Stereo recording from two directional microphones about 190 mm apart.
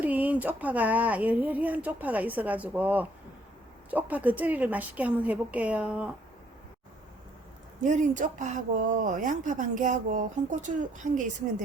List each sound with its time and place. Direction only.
0.0 s a woman's voice: 10° right (ahead or behind)
7.9 s speech: 40° right (ahead or behind)